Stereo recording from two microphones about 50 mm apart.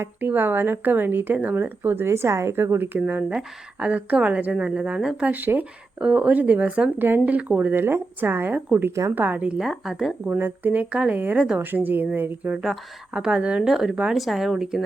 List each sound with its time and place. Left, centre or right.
0.2 s a woman's voice: right
2.7 s speech: right
3.1 s a woman's voice: right
5.2 s speech: right
6.0 s speech: right
7.8 s a woman's voice: right
9.6 s speech: centre
10.2 s speech: right
10.8 s a woman's voice: right
11.1 s speech: right
11.3 s a woman's voice: right
11.6 s a woman's voice: right
13.1 s a woman's voice: centre
13.7 s speech: centre